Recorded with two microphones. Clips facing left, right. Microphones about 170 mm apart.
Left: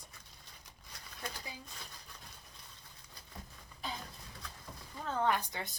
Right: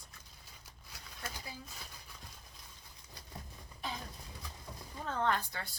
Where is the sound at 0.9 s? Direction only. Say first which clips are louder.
Left 1 dB; 5° right (ahead or behind).